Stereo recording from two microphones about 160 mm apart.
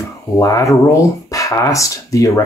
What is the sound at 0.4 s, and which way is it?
Speech, 20° left (ahead or behind).